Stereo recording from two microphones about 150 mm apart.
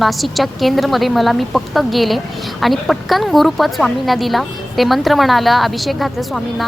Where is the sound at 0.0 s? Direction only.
Centre (ahead or behind).